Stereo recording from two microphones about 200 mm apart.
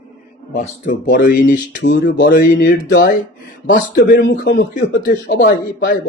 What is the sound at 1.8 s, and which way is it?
Speech, 60° left (ahead or behind).